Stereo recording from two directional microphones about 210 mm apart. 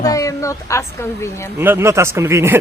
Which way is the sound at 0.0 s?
15° left (ahead or behind).